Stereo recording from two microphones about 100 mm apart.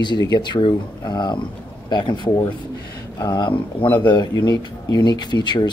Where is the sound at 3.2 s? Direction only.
45° left (ahead or behind).